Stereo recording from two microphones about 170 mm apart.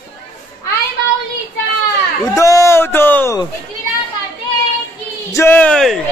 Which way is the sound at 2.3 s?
20° left (ahead or behind).